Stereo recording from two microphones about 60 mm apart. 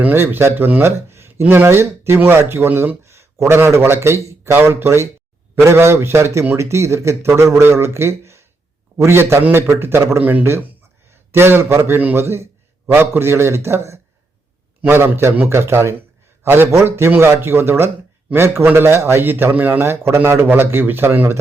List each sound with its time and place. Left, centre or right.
0.1 s speech: right
3.0 s a sound: right
3.5 s speech: right
4.5 s speech: right
10.2 s speech: right
11.1 s a man's voice: right
15.4 s a man's voice: right
19.8 s speech: right